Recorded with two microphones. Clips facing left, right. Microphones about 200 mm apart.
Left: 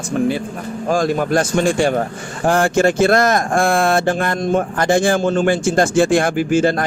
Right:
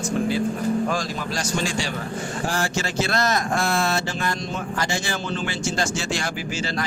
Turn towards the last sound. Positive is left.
turn(degrees=55)  # may be behind; listen again after turning